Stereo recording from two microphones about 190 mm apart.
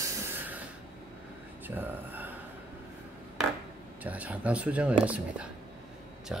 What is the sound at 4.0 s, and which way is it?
Speech, 10° right (ahead or behind).